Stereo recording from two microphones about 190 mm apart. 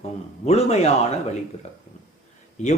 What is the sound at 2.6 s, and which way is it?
Speech, 35° left (ahead or behind).